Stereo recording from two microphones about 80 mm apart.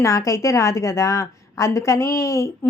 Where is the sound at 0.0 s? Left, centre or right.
Left.